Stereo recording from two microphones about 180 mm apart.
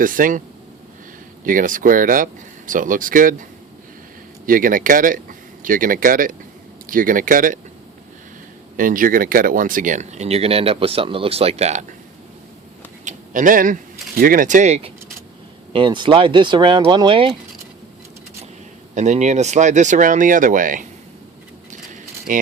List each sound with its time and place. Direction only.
0.0 s speech: 50° right (ahead or behind)
1.5 s speech: 50° right (ahead or behind)
4.4 s speech: 50° right (ahead or behind)
8.7 s speech: 50° right (ahead or behind)
13.1 s speech: 45° right (ahead or behind); by 17.3 s 30° right (ahead or behind)
18.9 s speech: 40° right (ahead or behind)
22.3 s speech: 45° right (ahead or behind)